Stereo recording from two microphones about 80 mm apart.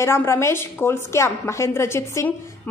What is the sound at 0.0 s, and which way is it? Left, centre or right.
A woman's voice, left.